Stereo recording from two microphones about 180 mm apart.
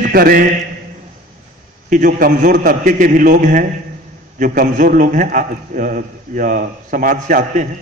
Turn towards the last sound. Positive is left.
turn(degrees=-45)  # may be behind; listen again after turning